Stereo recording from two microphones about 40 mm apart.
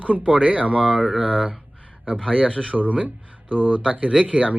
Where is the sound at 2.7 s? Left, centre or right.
Right.